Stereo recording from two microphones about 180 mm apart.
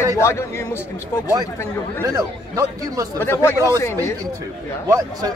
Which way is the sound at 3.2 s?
15° left (ahead or behind).